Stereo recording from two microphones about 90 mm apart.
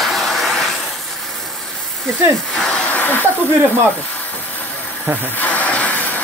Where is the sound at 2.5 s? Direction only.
10° left (ahead or behind).